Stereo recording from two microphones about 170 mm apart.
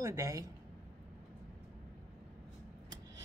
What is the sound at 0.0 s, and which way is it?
Speech, 15° right (ahead or behind).